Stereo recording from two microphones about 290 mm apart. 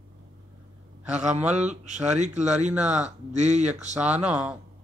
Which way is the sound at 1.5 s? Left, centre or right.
Right.